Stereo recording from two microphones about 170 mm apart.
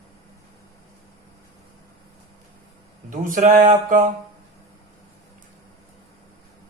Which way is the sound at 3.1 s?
50° right (ahead or behind).